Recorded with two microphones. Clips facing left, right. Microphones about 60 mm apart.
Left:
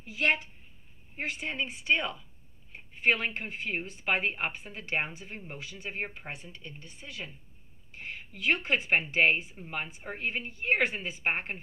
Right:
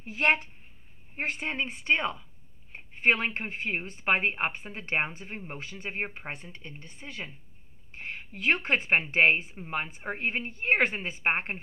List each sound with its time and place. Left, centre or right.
0.0 s speech: right